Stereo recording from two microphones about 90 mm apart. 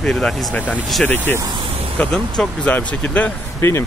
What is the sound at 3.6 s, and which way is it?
Speech, 30° left (ahead or behind).